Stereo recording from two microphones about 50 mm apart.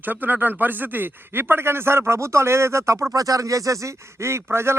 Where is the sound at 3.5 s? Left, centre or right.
Right.